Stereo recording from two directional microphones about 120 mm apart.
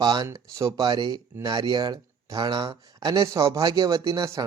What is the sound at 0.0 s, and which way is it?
Speech, 35° right (ahead or behind).